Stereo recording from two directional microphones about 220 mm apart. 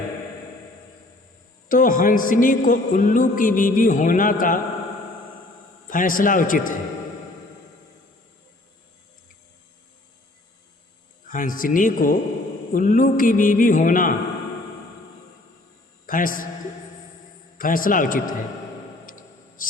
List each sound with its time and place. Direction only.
1.6 s a man's voice: 40° left (ahead or behind)
5.9 s a man's voice: 40° left (ahead or behind)
11.3 s a man's voice: 40° left (ahead or behind)
16.0 s a man's voice: 40° left (ahead or behind)
17.6 s a man's voice: 40° left (ahead or behind)
19.0 s a sound: 40° left (ahead or behind)